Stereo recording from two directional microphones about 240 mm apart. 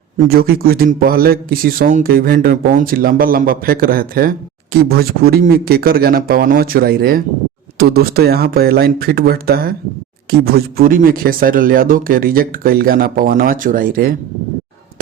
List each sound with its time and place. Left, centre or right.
0.3 s speech: right